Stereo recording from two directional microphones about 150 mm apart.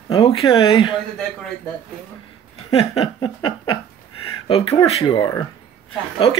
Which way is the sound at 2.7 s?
40° left (ahead or behind).